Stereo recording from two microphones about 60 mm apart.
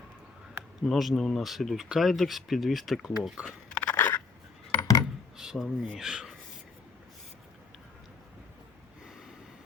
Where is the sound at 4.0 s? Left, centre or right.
Left.